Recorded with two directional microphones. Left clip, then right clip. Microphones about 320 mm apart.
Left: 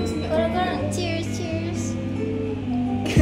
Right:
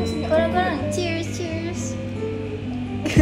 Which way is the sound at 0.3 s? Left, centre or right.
Right.